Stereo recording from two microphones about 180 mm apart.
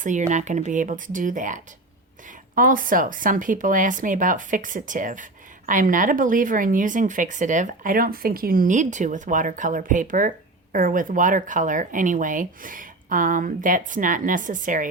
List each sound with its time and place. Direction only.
0.0 s speech: 40° right (ahead or behind)